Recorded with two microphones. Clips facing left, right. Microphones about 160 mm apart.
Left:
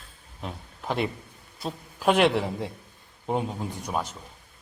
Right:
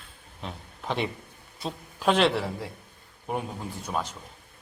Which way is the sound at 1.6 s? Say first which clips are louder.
Left 1 dB; 10° left (ahead or behind).